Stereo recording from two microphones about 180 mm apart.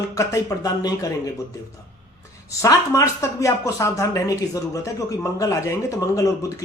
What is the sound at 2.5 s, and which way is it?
Speech, 15° left (ahead or behind).